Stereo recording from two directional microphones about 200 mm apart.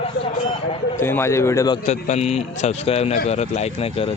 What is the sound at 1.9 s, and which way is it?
A man's voice, 35° left (ahead or behind).